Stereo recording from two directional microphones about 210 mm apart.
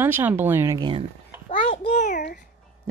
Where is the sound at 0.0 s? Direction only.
10° right (ahead or behind).